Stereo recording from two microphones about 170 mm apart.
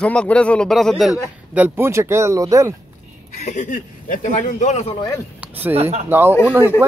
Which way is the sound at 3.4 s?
45° left (ahead or behind).